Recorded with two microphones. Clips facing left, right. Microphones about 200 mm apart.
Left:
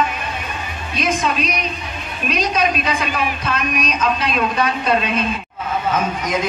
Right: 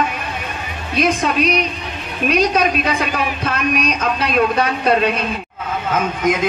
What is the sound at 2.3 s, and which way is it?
A woman's voice, 60° right (ahead or behind).